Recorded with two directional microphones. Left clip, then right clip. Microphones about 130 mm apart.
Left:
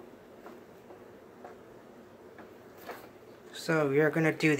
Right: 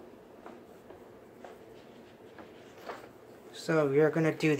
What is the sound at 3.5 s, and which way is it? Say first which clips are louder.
Speech: right 1 dB; 5° right (ahead or behind).